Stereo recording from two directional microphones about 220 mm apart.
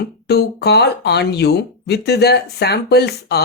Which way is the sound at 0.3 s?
45° left (ahead or behind).